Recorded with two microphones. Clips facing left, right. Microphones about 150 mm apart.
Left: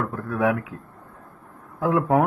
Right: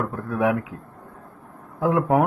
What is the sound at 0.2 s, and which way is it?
Speech, 20° right (ahead or behind).